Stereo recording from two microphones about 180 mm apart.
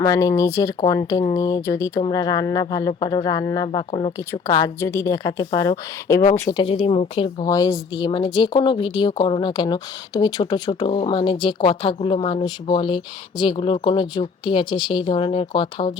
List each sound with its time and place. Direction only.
0.0 s speech: 20° left (ahead or behind)
4.3 s a woman's voice: 20° left (ahead or behind)
6.6 s speech: 30° left (ahead or behind)
7.4 s speech: 20° left (ahead or behind)